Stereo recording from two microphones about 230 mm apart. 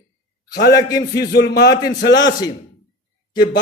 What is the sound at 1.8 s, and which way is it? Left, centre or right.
Mantra, left.